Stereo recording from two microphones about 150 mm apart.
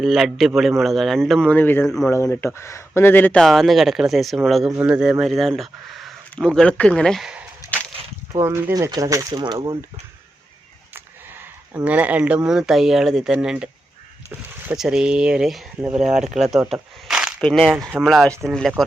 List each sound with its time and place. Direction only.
0.0 s speech: centre (ahead or behind)
7.6 s a sound: 20° left (ahead or behind)
8.3 s speech: 20° right (ahead or behind)
10.9 s a sound: 15° right (ahead or behind)
11.9 s speech: 10° right (ahead or behind)
16.0 s speech: 55° right (ahead or behind)
16.4 s speech: centre (ahead or behind)